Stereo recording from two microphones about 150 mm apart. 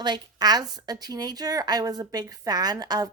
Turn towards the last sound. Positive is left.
turn(degrees=-25)  # may be behind; listen again after turning